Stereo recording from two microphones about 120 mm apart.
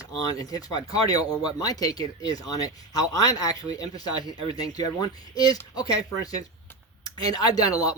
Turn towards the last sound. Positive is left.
turn(degrees=30)  # may be behind; listen again after turning